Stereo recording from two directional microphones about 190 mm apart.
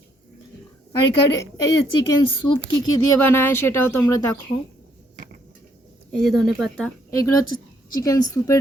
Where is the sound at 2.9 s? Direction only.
15° left (ahead or behind).